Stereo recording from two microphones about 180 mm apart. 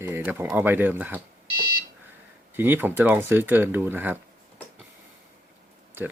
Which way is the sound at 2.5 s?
10° right (ahead or behind).